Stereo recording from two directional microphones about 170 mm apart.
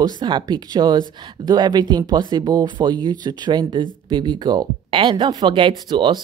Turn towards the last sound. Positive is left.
turn(degrees=-25)  # may be behind; listen again after turning